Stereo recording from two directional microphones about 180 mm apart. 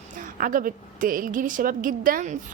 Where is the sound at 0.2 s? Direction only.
50° right (ahead or behind).